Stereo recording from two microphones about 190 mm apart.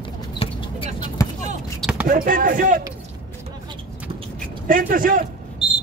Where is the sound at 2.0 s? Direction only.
45° right (ahead or behind).